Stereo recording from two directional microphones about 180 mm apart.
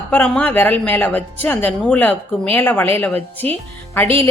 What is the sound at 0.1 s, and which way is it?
A woman's voice, 10° left (ahead or behind).